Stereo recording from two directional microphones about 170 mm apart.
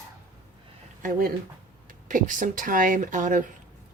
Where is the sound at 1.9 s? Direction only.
50° right (ahead or behind).